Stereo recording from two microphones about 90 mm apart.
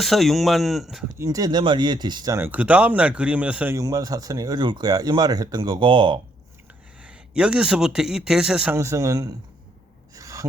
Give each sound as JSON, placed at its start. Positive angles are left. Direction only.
{"t": 0.0, "sound": "speech", "side_deg": 0}
{"t": 1.2, "sound": "speech", "side_deg": -45}
{"t": 2.5, "sound": "speech", "side_deg": -15}
{"t": 3.8, "sound": "speech", "side_deg": -45}
{"t": 7.0, "sound": "a man's voice", "side_deg": -10}
{"t": 8.7, "sound": "a man's voice", "side_deg": -35}
{"t": 10.2, "sound": "gasp", "side_deg": -40}